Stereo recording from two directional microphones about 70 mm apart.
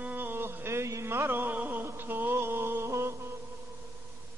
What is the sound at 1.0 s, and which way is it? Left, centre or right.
Music, right.